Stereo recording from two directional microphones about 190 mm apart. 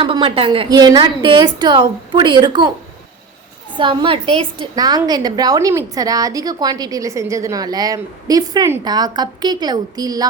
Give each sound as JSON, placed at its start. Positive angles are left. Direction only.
{"t": 0.0, "sound": "a woman's voice", "side_deg": -25}
{"t": 3.8, "sound": "a woman's voice", "side_deg": -25}